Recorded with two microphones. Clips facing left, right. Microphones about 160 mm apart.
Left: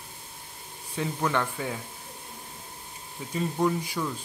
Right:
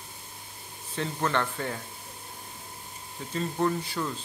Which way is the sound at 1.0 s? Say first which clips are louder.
Left 1 dB; 10° left (ahead or behind).